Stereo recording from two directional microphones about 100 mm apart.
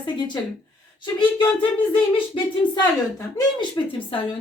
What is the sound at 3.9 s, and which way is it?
Speech, 60° left (ahead or behind).